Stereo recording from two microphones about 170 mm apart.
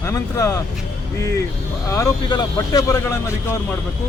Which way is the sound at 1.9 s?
20° left (ahead or behind).